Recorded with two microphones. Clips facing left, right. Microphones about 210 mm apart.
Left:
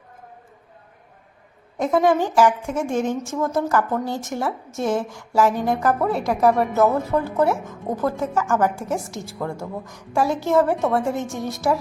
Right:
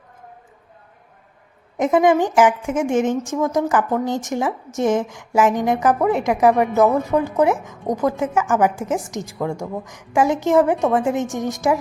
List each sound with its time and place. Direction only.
1.8 s a woman's voice: 15° right (ahead or behind)